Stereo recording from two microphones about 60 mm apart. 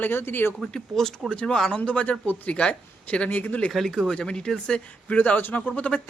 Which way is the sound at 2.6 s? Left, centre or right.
Centre.